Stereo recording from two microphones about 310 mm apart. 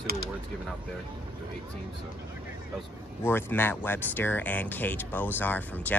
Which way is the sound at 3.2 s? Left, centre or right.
Centre.